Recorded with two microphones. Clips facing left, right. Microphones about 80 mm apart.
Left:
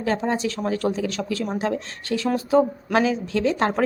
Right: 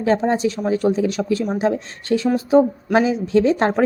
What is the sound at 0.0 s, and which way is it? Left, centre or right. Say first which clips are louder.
A woman's voice: right 5 dB; right.